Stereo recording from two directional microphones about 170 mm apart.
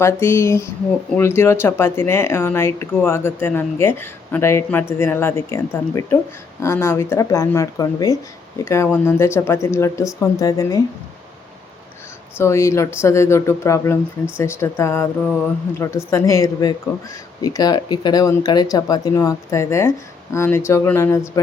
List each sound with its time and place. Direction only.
0.0 s speech: 15° left (ahead or behind)
12.4 s speech: 15° left (ahead or behind)